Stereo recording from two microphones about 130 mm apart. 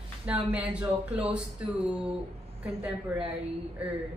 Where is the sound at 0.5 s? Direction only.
10° right (ahead or behind).